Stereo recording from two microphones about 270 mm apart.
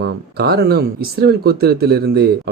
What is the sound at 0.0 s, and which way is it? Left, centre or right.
Speech, right.